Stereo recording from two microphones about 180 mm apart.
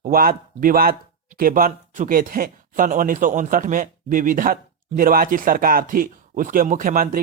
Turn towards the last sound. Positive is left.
turn(degrees=-50)  # may be behind; listen again after turning